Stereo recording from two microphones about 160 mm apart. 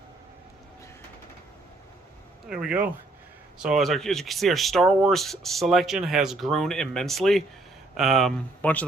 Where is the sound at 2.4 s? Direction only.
5° right (ahead or behind).